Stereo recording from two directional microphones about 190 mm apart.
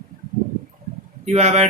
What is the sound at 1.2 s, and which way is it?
Speech, 35° right (ahead or behind).